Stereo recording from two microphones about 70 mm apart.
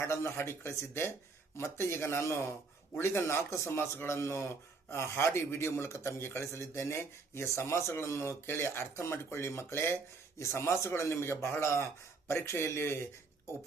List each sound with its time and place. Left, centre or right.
0.0 s speech: left